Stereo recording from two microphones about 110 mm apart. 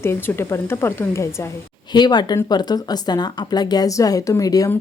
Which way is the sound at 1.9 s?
40° left (ahead or behind).